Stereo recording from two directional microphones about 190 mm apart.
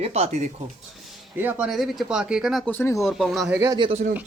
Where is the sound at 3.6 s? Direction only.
20° right (ahead or behind).